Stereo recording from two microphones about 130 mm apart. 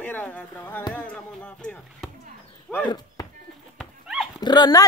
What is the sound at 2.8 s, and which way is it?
Chop, 30° left (ahead or behind).